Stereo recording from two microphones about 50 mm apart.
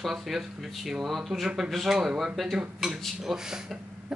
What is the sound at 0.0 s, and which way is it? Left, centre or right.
Speech, centre.